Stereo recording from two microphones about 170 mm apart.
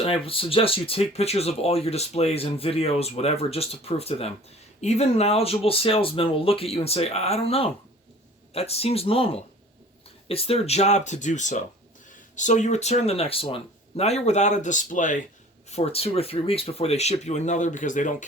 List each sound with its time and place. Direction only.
0.0 s speech: 35° left (ahead or behind)
15.7 s speech: 35° left (ahead or behind)